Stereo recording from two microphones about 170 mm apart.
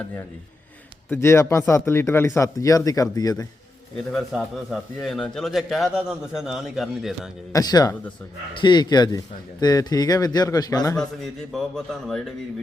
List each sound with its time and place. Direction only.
1.1 s speech: 15° left (ahead or behind)
4.1 s a man's voice: centre (ahead or behind)
7.5 s speech: 25° left (ahead or behind)
11.2 s a man's voice: centre (ahead or behind)